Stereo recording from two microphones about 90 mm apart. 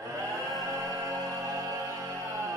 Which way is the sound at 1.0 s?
35° right (ahead or behind).